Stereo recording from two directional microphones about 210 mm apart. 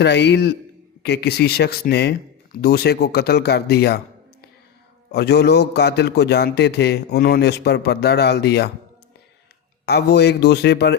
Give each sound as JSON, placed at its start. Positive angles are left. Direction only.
{"t": 0.0, "sound": "a man's voice", "side_deg": 55}
{"t": 9.8, "sound": "a man's voice", "side_deg": 50}